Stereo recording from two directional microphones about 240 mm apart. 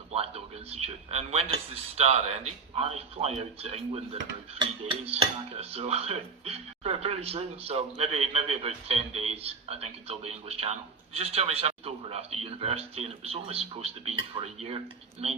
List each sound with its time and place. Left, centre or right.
0.1 s speech: right